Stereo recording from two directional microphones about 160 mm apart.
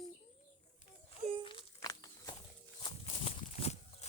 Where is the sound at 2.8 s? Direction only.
35° left (ahead or behind).